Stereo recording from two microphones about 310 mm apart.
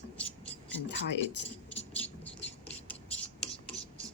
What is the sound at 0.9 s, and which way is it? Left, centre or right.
Speech, left.